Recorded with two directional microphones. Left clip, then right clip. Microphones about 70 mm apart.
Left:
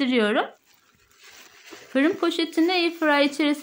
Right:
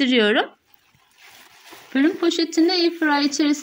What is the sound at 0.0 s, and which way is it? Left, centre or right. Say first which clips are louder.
Speech: right 4 dB; right.